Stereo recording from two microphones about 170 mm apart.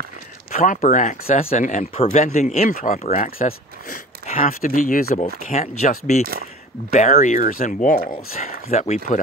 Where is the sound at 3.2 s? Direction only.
55° left (ahead or behind).